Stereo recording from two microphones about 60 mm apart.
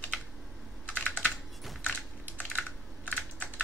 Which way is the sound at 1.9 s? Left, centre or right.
Centre.